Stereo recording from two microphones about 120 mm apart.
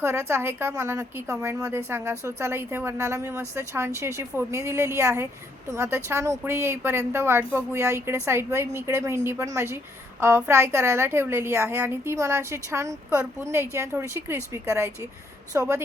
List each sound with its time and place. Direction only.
0.0 s a woman's voice: 20° right (ahead or behind)